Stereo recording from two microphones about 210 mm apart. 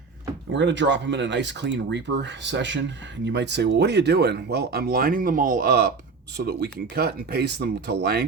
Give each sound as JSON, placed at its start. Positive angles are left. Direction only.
{"t": 0.5, "sound": "speech", "side_deg": -60}